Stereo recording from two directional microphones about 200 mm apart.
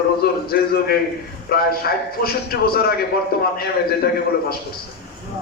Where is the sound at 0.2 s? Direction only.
50° left (ahead or behind).